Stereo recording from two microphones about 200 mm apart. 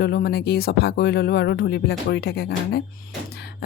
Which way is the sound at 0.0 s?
55° left (ahead or behind).